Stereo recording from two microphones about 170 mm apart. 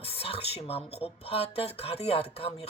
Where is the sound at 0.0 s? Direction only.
35° left (ahead or behind).